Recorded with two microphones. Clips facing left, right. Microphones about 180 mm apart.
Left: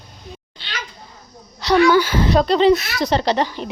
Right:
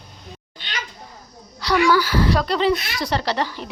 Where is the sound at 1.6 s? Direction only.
20° left (ahead or behind).